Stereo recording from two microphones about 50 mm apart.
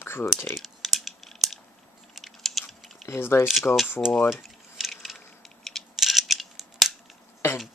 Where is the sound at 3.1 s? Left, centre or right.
Left.